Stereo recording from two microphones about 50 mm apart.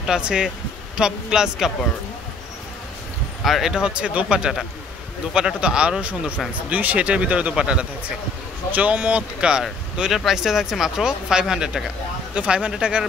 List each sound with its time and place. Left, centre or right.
0.0 s speech: centre
3.4 s speech: centre
3.7 s speech: centre
5.6 s speech: centre
8.7 s speech: right
9.4 s speech: centre